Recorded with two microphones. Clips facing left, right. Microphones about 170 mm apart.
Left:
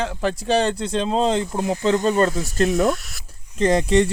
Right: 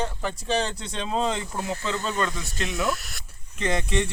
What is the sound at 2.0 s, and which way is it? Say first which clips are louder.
Speech: left 9 dB; 45° left (ahead or behind).